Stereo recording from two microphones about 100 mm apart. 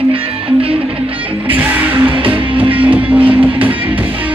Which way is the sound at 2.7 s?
15° right (ahead or behind).